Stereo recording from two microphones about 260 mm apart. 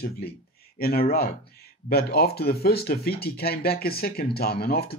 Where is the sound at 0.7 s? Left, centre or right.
Left.